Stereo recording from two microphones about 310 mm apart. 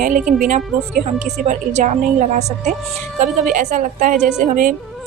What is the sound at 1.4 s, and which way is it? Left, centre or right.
Speech, right.